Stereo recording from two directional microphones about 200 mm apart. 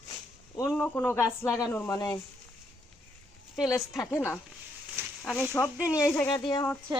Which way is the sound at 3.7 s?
15° left (ahead or behind).